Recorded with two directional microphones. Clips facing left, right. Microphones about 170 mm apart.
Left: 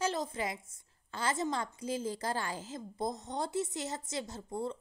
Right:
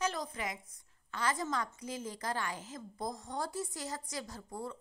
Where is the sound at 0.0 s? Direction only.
25° left (ahead or behind).